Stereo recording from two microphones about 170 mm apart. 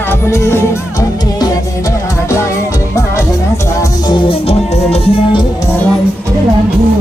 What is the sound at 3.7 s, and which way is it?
Music, 20° left (ahead or behind).